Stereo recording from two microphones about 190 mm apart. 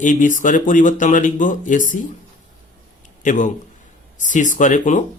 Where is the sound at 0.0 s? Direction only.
45° left (ahead or behind).